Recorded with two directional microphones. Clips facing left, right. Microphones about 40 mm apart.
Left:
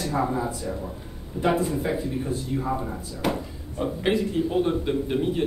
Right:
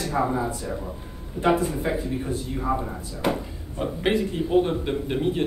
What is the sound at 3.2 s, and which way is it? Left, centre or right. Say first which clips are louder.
A man's voice: right 2 dB; centre.